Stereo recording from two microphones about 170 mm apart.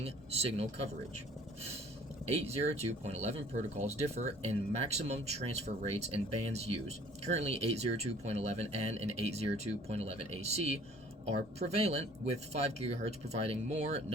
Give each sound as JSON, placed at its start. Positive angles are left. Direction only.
{"t": 0.0, "sound": "speech", "side_deg": -35}
{"t": 2.2, "sound": "speech", "side_deg": -40}